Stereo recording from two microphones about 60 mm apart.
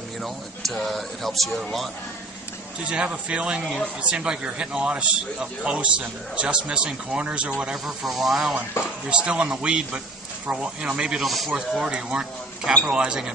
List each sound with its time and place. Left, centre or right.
0.2 s speech: centre
2.9 s a man's voice: centre
7.8 s speech: centre
8.8 s speech: left
9.1 s a man's voice: centre
11.2 s speech: centre
11.5 s a man's voice: centre